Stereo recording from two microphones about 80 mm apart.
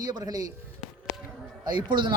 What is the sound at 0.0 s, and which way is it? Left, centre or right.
Speech, right.